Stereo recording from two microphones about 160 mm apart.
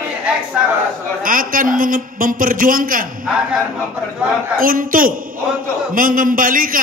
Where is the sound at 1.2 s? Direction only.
60° right (ahead or behind).